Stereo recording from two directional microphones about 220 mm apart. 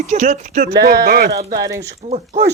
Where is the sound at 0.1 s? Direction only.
30° right (ahead or behind).